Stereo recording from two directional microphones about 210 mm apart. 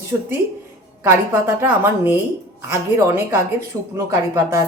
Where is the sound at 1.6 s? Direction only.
10° right (ahead or behind).